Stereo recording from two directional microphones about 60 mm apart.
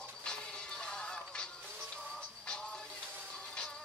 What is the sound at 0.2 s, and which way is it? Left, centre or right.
Music, centre.